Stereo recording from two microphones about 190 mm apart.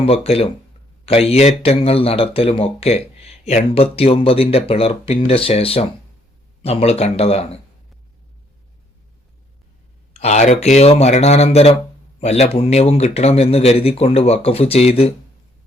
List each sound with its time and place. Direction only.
0.0 s speech: 30° left (ahead or behind)
10.2 s speech: 35° left (ahead or behind)